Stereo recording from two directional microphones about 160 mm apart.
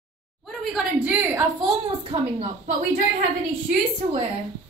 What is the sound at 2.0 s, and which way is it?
Speech, 40° right (ahead or behind).